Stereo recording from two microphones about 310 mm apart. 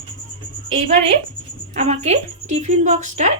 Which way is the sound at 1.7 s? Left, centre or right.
Right.